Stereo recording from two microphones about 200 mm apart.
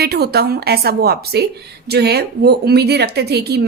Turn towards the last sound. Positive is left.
turn(degrees=-55)  # may be behind; listen again after turning